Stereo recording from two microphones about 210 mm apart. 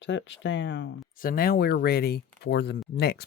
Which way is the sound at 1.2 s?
45° left (ahead or behind).